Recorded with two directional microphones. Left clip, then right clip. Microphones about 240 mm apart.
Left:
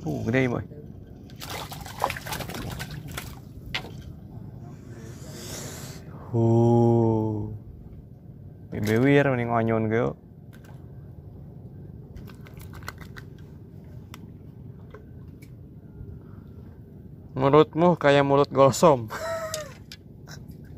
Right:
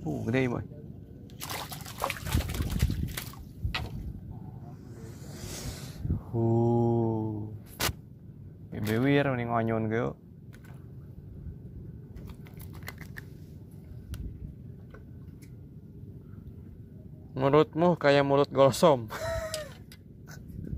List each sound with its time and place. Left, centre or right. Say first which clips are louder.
0.2 s speech: left 5 dB; centre
1.4 s liquid: left 2 dB; centre
5.0 s a sound: left 4 dB; centre
6.3 s mantra: left 6 dB; centre
8.7 s speech: left 6 dB; centre
12.8 s a sound: left 3 dB; centre
17.3 s speech: left 5 dB; centre